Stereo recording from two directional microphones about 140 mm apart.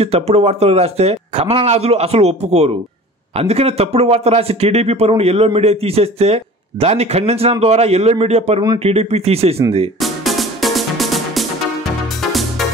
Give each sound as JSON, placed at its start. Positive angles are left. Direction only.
{"t": 0.0, "sound": "speech", "side_deg": -45}
{"t": 9.9, "sound": "music", "side_deg": 0}